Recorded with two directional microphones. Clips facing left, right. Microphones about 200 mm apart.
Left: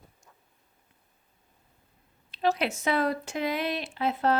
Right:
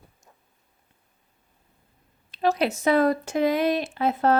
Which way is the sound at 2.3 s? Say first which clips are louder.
Right 4 dB; 45° right (ahead or behind).